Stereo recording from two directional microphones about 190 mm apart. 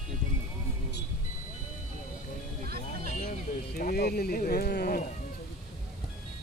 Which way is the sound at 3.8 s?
55° left (ahead or behind).